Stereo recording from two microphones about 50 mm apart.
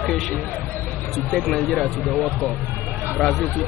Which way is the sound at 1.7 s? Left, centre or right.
Centre.